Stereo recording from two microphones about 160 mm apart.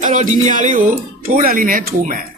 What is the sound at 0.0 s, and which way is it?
Speech, 50° right (ahead or behind).